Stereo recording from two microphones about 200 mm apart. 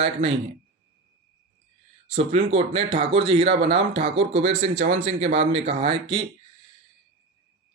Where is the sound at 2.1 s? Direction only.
30° right (ahead or behind).